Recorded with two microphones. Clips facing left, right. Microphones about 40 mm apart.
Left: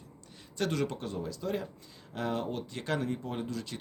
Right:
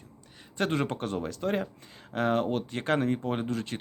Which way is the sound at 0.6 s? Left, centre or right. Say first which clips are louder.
Right 3 dB; right.